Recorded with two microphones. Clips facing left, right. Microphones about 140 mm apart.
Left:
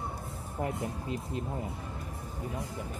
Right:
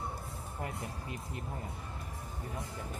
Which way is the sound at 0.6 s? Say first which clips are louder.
Left 8 dB; 25° left (ahead or behind).